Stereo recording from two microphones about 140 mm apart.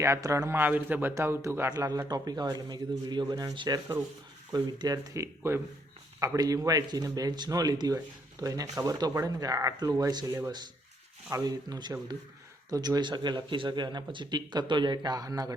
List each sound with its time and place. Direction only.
0.0 s a man's voice: 20° right (ahead or behind)
11.3 s a man's voice: 25° right (ahead or behind)